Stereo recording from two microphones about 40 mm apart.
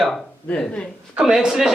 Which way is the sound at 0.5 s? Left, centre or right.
Left.